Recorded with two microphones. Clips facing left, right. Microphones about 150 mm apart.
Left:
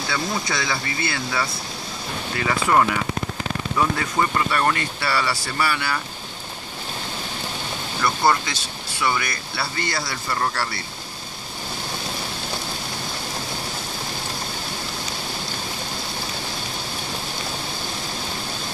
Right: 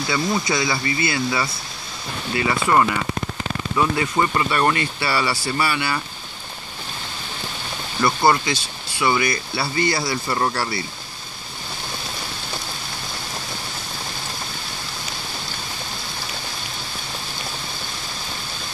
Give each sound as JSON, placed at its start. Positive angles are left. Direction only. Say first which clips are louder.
{"t": 0.1, "sound": "speech", "louder": "right 4 dB", "side_deg": -5}
{"t": 8.0, "sound": "speech", "louder": "right 2 dB", "side_deg": -10}